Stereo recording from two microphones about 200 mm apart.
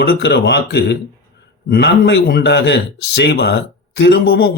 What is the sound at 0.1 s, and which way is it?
Speech, 55° left (ahead or behind).